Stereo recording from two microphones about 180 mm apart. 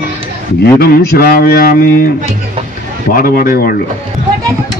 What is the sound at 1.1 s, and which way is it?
Speech, 55° left (ahead or behind).